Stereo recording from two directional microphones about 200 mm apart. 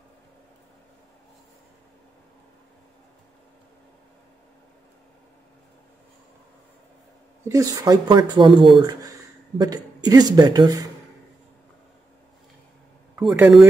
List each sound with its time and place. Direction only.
7.4 s speech: 15° right (ahead or behind)
13.2 s speech: centre (ahead or behind)